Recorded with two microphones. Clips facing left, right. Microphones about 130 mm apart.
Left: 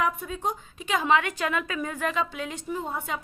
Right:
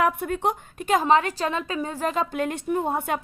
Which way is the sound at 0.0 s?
65° right (ahead or behind).